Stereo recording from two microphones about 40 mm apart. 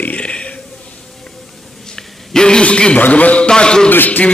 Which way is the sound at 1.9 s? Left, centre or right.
Centre.